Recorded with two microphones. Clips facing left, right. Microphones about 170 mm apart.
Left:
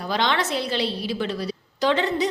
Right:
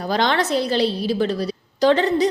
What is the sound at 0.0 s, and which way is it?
A woman's voice, 40° right (ahead or behind).